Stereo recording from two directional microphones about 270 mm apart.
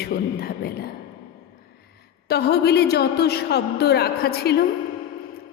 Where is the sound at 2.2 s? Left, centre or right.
Left.